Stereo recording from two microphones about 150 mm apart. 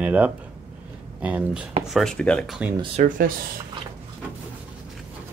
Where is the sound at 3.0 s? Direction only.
55° right (ahead or behind).